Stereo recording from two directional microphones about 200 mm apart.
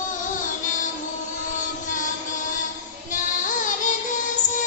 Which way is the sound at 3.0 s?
40° left (ahead or behind).